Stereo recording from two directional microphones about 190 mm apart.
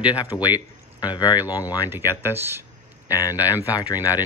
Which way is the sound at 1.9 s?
10° right (ahead or behind).